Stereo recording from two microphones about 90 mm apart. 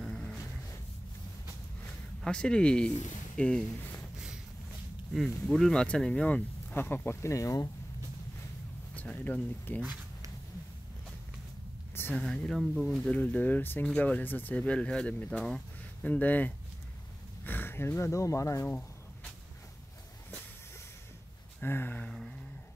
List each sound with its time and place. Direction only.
0.0 s a sound: centre (ahead or behind)
2.2 s speech: 10° left (ahead or behind)
5.1 s speech: centre (ahead or behind); by 7.7 s 35° left (ahead or behind)
8.9 s speech: 15° left (ahead or behind)
11.9 s a sound: 25° left (ahead or behind)
12.2 s speech: 5° left (ahead or behind)
13.1 s speech: 20° left (ahead or behind)
16.1 s speech: 20° left (ahead or behind); by 18.7 s 35° left (ahead or behind)
21.5 s speech: 20° left (ahead or behind)